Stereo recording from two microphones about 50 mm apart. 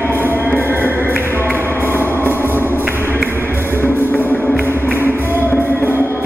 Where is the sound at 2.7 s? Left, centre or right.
Right.